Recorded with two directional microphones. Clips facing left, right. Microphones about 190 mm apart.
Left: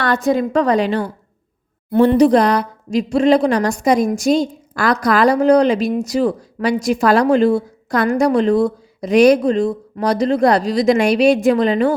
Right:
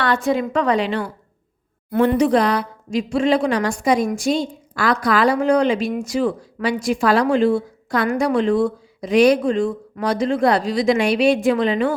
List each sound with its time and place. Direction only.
0.0 s speech: 40° left (ahead or behind)